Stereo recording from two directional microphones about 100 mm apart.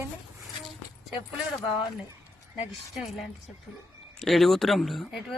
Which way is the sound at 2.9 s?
Centre (ahead or behind).